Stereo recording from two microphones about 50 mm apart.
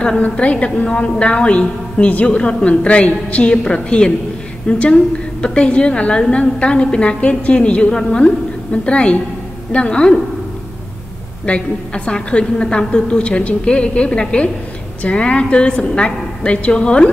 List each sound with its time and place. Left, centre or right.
0.2 s a woman's voice: left
11.4 s a woman's voice: left